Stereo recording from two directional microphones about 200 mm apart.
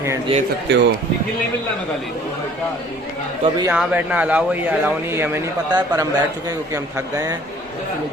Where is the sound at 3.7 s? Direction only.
5° right (ahead or behind).